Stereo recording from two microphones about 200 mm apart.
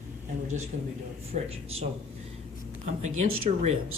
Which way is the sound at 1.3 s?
35° right (ahead or behind).